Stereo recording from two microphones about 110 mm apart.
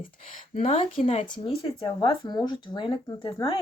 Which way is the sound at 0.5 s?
75° left (ahead or behind).